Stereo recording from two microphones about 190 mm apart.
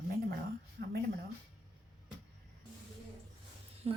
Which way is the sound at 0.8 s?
55° right (ahead or behind).